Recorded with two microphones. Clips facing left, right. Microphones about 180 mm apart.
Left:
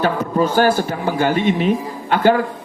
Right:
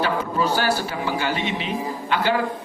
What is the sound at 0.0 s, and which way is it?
A man's voice, 50° left (ahead or behind).